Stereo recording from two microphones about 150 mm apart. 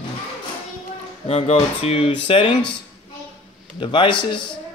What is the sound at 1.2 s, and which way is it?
Speech, 40° left (ahead or behind).